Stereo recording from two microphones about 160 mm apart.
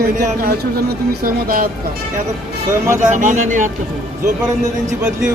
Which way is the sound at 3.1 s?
50° right (ahead or behind).